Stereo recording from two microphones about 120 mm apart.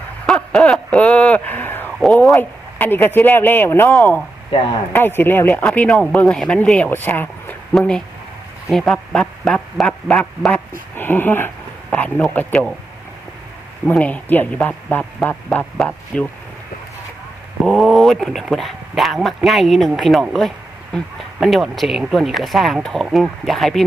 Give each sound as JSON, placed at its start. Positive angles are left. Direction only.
{"t": 0.3, "sound": "a sound", "side_deg": 5}
{"t": 2.3, "sound": "speech", "side_deg": 15}
{"t": 4.9, "sound": "speech", "side_deg": 20}
{"t": 7.8, "sound": "speech", "side_deg": 5}
{"t": 10.9, "sound": "speech", "side_deg": 15}
{"t": 13.8, "sound": "speech", "side_deg": 10}
{"t": 17.7, "sound": "speech", "side_deg": 5}